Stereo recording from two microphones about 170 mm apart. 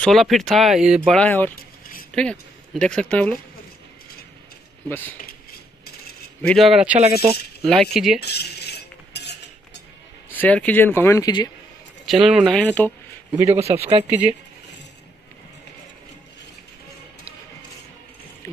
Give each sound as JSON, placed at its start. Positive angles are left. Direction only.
{"t": 0.0, "sound": "speech", "side_deg": 0}
{"t": 1.5, "sound": "a sound", "side_deg": 55}
{"t": 2.1, "sound": "speech", "side_deg": 5}
{"t": 4.8, "sound": "speech", "side_deg": 10}
{"t": 6.4, "sound": "speech", "side_deg": 0}
{"t": 8.2, "sound": "cutlery", "side_deg": 75}
{"t": 10.3, "sound": "speech", "side_deg": 10}
{"t": 12.1, "sound": "speech", "side_deg": 0}
{"t": 13.5, "sound": "speech", "side_deg": -40}